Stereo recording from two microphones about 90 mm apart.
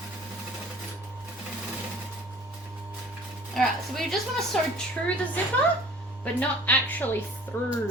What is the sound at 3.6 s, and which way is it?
A woman's voice, 5° left (ahead or behind).